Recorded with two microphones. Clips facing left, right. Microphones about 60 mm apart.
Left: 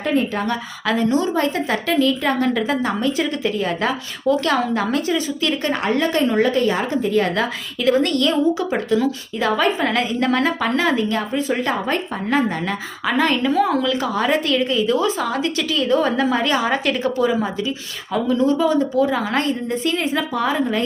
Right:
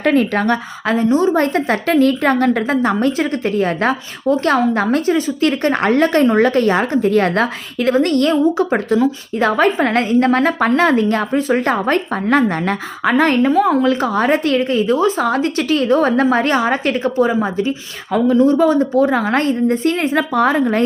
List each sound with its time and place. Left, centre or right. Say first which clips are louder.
0.0 s a woman's voice: right 5 dB; right
0.9 s a woman's voice: right 4 dB; right